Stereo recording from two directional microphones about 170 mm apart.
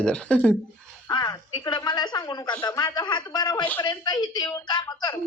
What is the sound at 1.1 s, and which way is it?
Speech, 25° left (ahead or behind).